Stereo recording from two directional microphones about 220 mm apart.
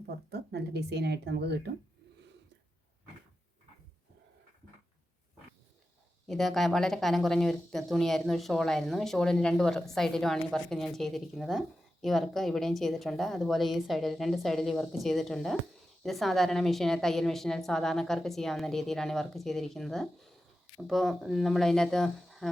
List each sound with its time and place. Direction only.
0.3 s speech: 50° right (ahead or behind)
6.2 s speech: centre (ahead or behind)